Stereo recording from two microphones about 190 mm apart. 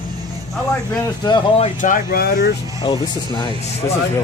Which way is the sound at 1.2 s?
25° left (ahead or behind).